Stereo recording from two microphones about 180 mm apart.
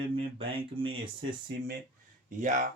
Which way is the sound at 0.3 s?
30° right (ahead or behind).